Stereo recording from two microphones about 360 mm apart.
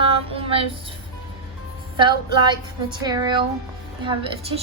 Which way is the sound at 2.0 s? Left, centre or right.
Centre.